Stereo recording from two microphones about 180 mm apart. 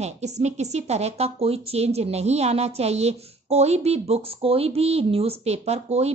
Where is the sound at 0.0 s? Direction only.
40° right (ahead or behind).